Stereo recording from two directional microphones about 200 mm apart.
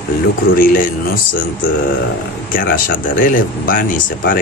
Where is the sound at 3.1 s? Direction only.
40° left (ahead or behind).